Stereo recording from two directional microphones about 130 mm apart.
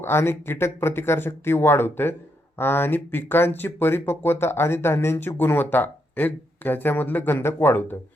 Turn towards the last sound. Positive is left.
turn(degrees=15)  # may be behind; listen again after turning